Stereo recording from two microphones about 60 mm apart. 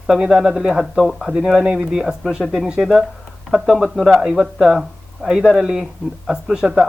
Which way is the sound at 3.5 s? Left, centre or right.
Centre.